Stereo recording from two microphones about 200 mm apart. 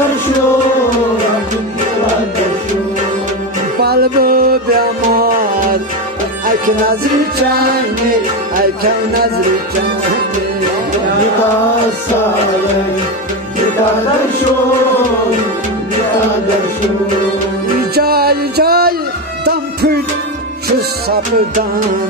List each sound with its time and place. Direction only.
3.8 s music: 50° right (ahead or behind)
17.9 s music: 50° right (ahead or behind)
21.1 s music: 45° right (ahead or behind)